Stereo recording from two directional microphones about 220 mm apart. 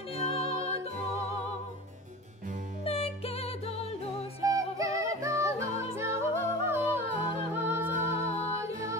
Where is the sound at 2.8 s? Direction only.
25° left (ahead or behind).